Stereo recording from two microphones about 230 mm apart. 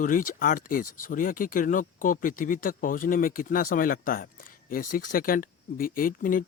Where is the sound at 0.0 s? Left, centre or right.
Left.